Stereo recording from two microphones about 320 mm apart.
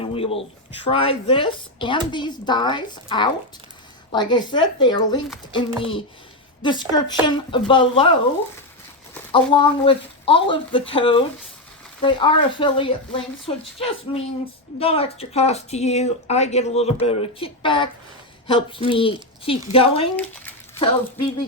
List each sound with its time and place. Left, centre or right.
0.0 s a woman's voice: centre
9.3 s a woman's voice: centre